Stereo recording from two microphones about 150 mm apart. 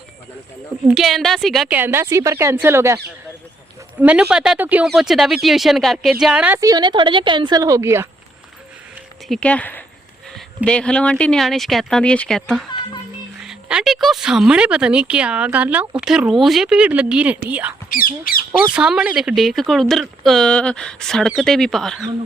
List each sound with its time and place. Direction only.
0.9 s speech: 5° right (ahead or behind)
1.7 s speech: 15° right (ahead or behind)
4.0 s speech: 10° right (ahead or behind)
6.6 s a woman's voice: 25° right (ahead or behind)
9.3 s speech: 10° left (ahead or behind); by 17.7 s 10° right (ahead or behind)
17.8 s speech: 70° left (ahead or behind)
18.7 s speech: 5° right (ahead or behind)